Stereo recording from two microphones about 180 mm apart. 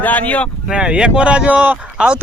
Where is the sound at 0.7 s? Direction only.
5° right (ahead or behind).